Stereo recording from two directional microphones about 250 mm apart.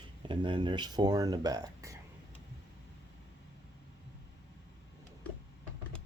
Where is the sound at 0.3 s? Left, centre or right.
Centre.